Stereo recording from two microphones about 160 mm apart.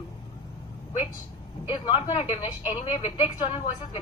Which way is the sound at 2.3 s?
35° left (ahead or behind).